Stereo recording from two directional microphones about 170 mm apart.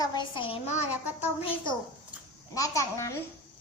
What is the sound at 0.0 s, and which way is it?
Speech, 25° left (ahead or behind).